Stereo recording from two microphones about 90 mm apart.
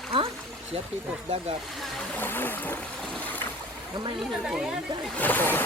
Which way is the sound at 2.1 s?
20° left (ahead or behind).